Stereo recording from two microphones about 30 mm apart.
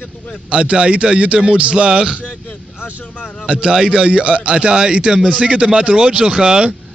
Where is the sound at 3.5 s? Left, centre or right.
Right.